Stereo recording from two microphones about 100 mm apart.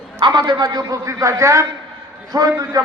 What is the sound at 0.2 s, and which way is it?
A man's voice, 50° right (ahead or behind).